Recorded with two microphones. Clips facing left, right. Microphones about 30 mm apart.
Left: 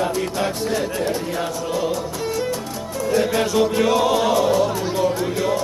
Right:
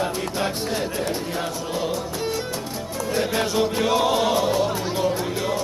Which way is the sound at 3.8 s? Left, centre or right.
Centre.